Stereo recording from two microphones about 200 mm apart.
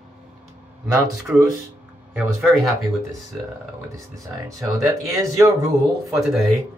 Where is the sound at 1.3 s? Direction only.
10° right (ahead or behind).